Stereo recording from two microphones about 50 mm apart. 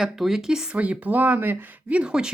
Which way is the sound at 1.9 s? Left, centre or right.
Centre.